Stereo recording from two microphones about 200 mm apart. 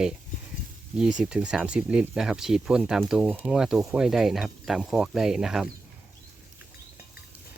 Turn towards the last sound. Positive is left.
turn(degrees=0)  # may be behind; listen again after turning